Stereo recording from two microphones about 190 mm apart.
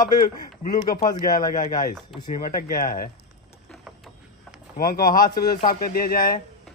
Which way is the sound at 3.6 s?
Centre (ahead or behind).